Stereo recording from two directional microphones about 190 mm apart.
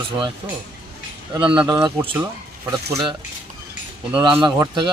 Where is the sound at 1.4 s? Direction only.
25° right (ahead or behind).